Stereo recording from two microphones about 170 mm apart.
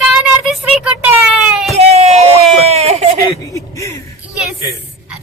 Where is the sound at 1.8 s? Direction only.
40° right (ahead or behind).